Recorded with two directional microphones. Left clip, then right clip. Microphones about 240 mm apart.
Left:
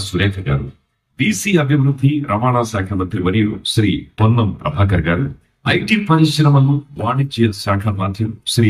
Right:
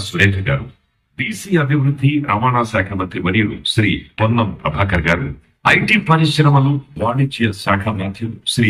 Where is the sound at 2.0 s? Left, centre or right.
Left.